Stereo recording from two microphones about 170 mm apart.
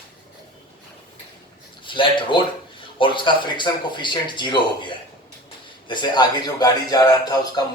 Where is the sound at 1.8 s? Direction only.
30° left (ahead or behind).